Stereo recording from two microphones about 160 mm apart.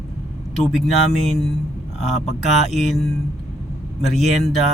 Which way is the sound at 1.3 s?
Centre (ahead or behind).